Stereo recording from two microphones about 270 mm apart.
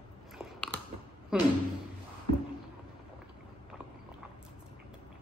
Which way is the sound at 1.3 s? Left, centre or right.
Centre.